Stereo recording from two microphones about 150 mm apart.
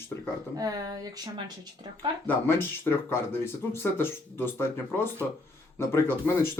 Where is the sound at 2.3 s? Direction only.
15° left (ahead or behind).